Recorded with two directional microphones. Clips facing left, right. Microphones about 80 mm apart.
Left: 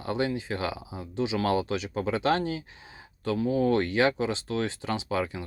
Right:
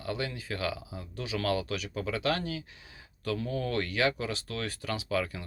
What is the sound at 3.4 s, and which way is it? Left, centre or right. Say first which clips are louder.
Speech: left 10 dB; centre.